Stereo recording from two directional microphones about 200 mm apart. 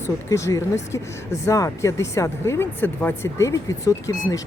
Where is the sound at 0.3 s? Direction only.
15° left (ahead or behind).